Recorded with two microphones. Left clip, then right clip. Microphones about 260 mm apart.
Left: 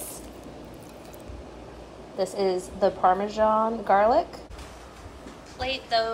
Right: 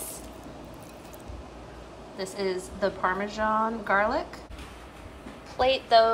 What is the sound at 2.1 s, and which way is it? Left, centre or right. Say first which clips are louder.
Speech: left 7 dB; right.